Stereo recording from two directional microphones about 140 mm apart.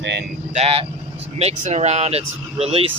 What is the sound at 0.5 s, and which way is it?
Speech, 45° right (ahead or behind).